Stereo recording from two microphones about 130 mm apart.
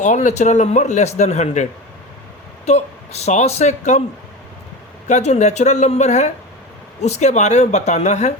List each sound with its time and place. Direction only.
0.0 s a man's voice: 65° left (ahead or behind)
2.6 s a man's voice: 55° left (ahead or behind)
5.0 s a man's voice: 60° left (ahead or behind)